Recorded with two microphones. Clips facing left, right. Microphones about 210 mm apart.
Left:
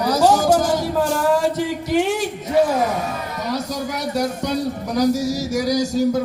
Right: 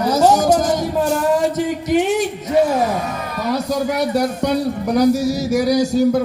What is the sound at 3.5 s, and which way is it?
Speech, 60° right (ahead or behind).